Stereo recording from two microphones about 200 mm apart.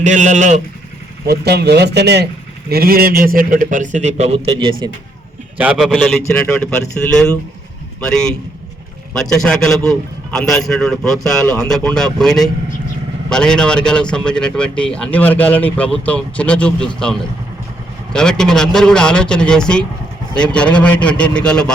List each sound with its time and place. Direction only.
0.0 s speech: 40° right (ahead or behind)
1.3 s a man's voice: 55° right (ahead or behind); by 4.7 s 25° right (ahead or behind)
5.5 s speech: 5° right (ahead or behind)
8.0 s speech: 5° left (ahead or behind)